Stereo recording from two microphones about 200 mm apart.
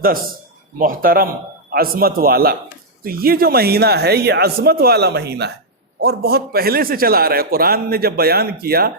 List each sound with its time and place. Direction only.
0.8 s a man's voice: 45° right (ahead or behind)